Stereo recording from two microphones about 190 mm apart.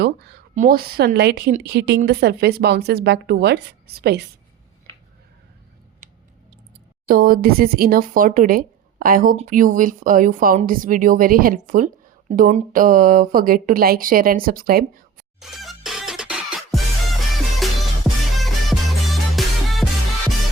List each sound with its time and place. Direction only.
0.0 s speech: 60° right (ahead or behind)
0.5 s speech: 45° right (ahead or behind)
7.1 s speech: 50° right (ahead or behind)
15.4 s music: centre (ahead or behind)